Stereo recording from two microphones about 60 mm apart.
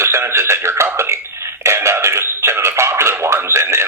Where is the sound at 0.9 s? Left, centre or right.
Right.